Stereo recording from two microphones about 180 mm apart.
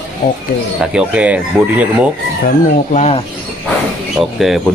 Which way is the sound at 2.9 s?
40° left (ahead or behind).